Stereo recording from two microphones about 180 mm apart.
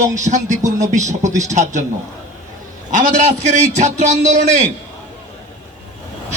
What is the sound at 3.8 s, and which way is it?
Speech, 40° right (ahead or behind).